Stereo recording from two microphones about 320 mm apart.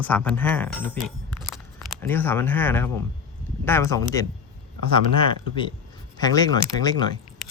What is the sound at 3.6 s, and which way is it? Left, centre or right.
Speech, centre.